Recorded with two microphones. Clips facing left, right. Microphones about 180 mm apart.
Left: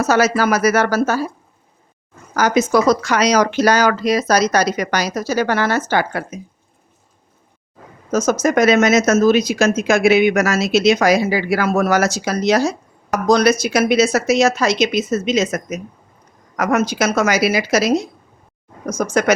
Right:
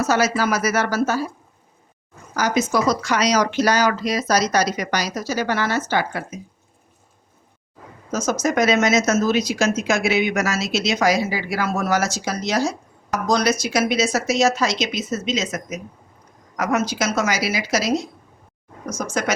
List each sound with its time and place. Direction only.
0.0 s speech: 60° left (ahead or behind)
2.3 s speech: 65° left (ahead or behind)
8.1 s speech: 55° left (ahead or behind)